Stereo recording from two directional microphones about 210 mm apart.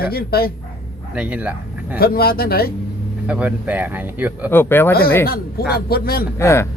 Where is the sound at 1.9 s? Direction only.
45° left (ahead or behind).